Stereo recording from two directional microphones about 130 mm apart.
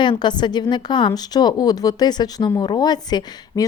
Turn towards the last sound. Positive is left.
turn(degrees=30)  # may be behind; listen again after turning